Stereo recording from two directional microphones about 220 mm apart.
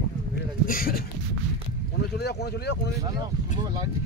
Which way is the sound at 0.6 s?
40° left (ahead or behind).